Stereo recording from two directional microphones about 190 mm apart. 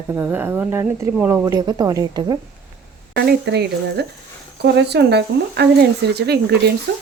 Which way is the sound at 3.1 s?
60° right (ahead or behind).